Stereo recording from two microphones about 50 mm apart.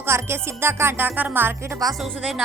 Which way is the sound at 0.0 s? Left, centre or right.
Right.